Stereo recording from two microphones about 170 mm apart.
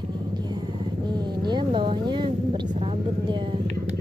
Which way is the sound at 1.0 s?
25° right (ahead or behind).